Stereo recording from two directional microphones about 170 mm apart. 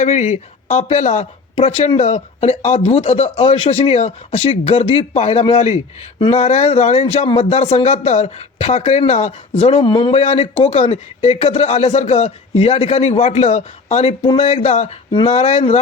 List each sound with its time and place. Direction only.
0.0 s speech: 40° left (ahead or behind)